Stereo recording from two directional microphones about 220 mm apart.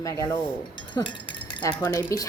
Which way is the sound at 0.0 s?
15° left (ahead or behind).